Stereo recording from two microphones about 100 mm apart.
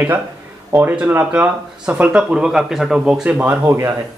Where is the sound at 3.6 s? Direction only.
30° right (ahead or behind).